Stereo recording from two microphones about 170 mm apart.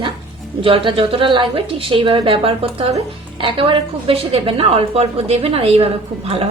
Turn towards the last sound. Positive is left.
turn(degrees=-35)  # may be behind; listen again after turning